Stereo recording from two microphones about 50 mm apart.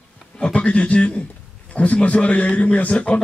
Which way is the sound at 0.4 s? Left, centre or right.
Left.